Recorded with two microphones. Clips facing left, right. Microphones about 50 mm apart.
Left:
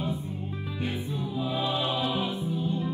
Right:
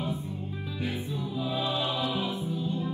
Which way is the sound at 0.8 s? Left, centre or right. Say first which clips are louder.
Left 1 dB; left.